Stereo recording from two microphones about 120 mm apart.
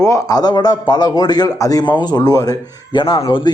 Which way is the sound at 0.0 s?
30° left (ahead or behind).